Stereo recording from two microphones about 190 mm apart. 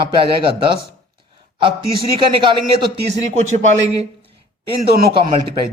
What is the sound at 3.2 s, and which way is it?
Speech, 35° right (ahead or behind).